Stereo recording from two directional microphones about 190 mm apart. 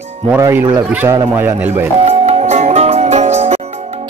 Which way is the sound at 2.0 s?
30° right (ahead or behind).